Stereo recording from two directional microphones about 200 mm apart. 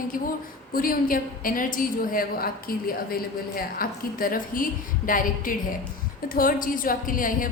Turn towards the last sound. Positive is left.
turn(degrees=45)  # may be behind; listen again after turning